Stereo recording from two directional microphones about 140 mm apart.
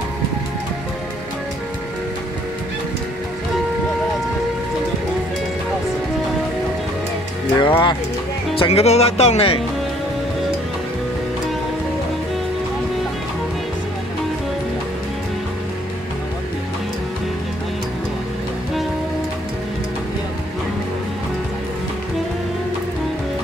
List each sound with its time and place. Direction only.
7.5 s speech: 35° left (ahead or behind)